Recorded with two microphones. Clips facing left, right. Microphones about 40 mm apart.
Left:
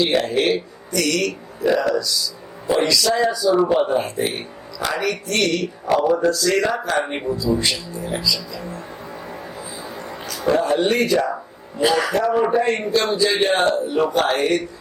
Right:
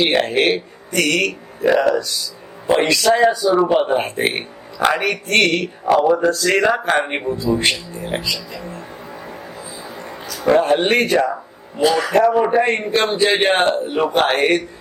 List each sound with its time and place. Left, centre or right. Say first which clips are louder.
0.0 s a man's voice: right 2 dB; right
3.9 s a man's voice: right 2 dB; right
6.2 s a man's voice: right 3 dB; right
10.5 s a man's voice: right 4 dB; right